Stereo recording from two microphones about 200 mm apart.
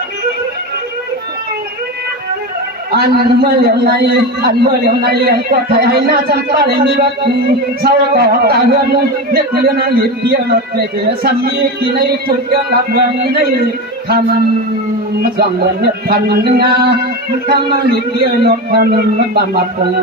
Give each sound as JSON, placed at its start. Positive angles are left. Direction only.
{"t": 2.9, "sound": "a man's voice", "side_deg": -55}
{"t": 15.2, "sound": "a man's voice", "side_deg": -50}